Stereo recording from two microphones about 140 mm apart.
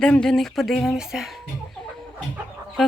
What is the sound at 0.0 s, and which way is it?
Speech, 5° left (ahead or behind).